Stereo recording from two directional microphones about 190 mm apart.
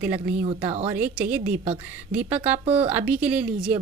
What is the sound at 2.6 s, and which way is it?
Speech, 30° right (ahead or behind).